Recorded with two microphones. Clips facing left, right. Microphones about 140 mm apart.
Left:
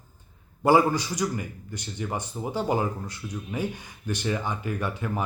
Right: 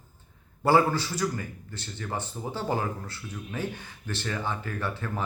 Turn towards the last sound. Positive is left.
turn(degrees=15)  # may be behind; listen again after turning